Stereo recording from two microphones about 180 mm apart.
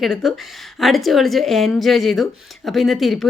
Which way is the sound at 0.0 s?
Centre (ahead or behind).